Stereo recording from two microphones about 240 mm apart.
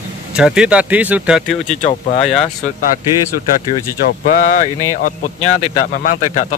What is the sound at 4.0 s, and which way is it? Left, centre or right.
A man's voice, left.